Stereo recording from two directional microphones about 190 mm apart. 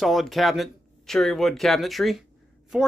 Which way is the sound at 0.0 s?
Centre (ahead or behind).